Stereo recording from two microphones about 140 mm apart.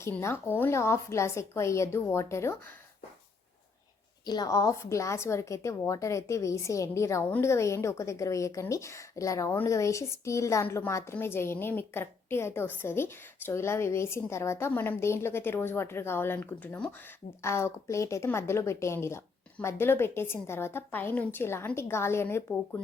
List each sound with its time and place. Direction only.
0.0 s a woman's voice: 20° left (ahead or behind)
4.3 s a woman's voice: 25° left (ahead or behind)